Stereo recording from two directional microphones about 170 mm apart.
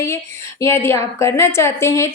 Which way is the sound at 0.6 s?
15° left (ahead or behind).